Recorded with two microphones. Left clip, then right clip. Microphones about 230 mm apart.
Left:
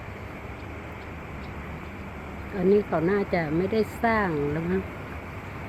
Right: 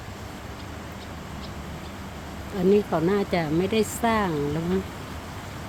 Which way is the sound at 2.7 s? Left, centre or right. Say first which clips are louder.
Right 1 dB; right.